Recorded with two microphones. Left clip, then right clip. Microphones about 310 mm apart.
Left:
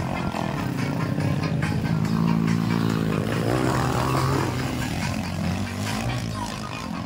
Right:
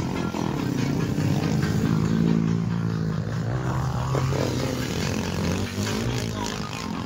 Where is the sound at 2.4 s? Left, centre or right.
Left.